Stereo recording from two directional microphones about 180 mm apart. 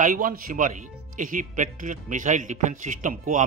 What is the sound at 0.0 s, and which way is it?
A man's voice, 45° right (ahead or behind).